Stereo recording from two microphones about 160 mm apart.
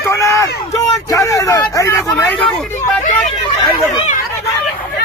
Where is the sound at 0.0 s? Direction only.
20° left (ahead or behind).